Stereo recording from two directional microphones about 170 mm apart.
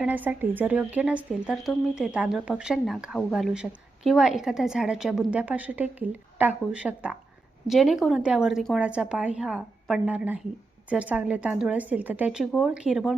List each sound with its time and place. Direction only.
0.0 s a woman's voice: 10° right (ahead or behind)